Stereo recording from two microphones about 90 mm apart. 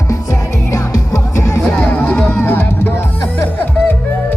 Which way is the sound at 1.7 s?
20° left (ahead or behind).